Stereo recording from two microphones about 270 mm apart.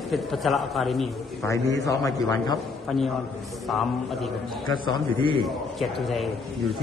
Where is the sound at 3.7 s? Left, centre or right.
Centre.